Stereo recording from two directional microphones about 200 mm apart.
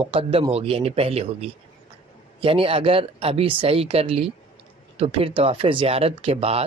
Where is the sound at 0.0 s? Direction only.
25° right (ahead or behind).